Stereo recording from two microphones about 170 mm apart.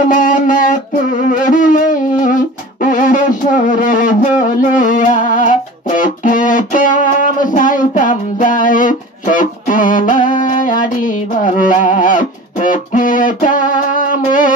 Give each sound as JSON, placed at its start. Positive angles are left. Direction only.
{"t": 0.0, "sound": "music", "side_deg": 50}